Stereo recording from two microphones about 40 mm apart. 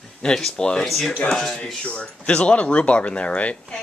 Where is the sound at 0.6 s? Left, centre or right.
Centre.